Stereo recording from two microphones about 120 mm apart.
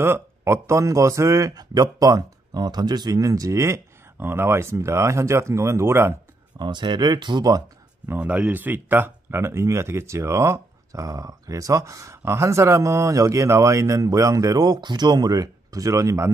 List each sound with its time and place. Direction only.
0.0 s speech: 20° right (ahead or behind)
6.6 s speech: 40° right (ahead or behind)
8.1 s speech: 15° right (ahead or behind)